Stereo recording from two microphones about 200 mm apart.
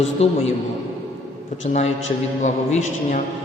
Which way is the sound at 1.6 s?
35° left (ahead or behind).